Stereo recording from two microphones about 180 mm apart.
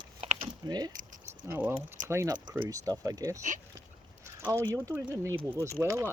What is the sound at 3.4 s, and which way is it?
Speech, 45° right (ahead or behind).